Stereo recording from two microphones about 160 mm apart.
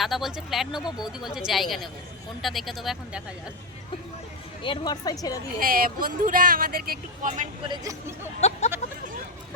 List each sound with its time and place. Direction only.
0.0 s speech: centre (ahead or behind)
4.6 s speech: 30° left (ahead or behind)
5.5 s speech: 65° right (ahead or behind)
7.7 s speech: 20° right (ahead or behind)
8.2 s a sound: 45° left (ahead or behind)